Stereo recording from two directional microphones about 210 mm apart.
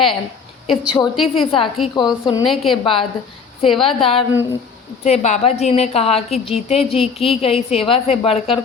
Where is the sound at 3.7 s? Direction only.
Centre (ahead or behind).